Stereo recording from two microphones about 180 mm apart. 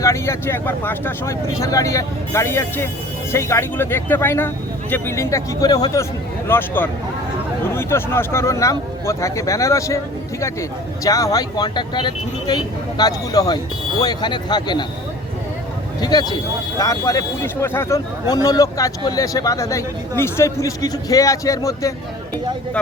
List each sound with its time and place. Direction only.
0.0 s speech: 15° left (ahead or behind)
16.0 s speech: 25° left (ahead or behind)